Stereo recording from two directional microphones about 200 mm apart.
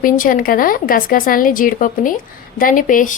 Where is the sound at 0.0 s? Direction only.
45° left (ahead or behind).